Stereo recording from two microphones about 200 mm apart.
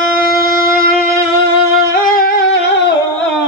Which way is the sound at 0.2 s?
45° left (ahead or behind).